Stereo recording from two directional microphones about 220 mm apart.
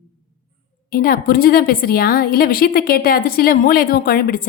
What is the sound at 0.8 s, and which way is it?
A woman's voice, 40° left (ahead or behind).